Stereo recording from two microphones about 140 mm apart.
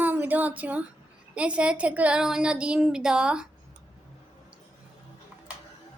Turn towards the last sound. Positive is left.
turn(degrees=-10)  # may be behind; listen again after turning